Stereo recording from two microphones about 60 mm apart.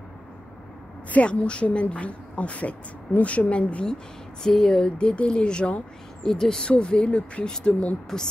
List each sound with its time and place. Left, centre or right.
1.1 s speech: left